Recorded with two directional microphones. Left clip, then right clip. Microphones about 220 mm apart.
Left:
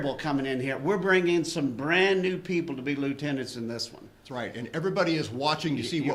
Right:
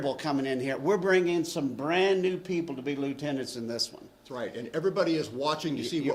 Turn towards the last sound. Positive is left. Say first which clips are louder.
# left 1 dB
turn(degrees=5)  # may be behind; listen again after turning